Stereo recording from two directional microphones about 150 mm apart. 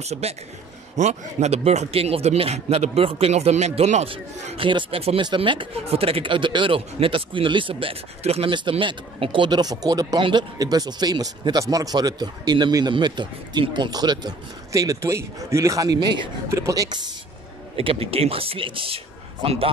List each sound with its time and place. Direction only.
0.0 s a woman's voice: 45° right (ahead or behind); by 17.1 s 25° right (ahead or behind)
17.7 s speech: 40° right (ahead or behind)